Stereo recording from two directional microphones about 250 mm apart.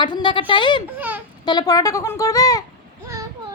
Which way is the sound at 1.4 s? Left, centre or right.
Centre.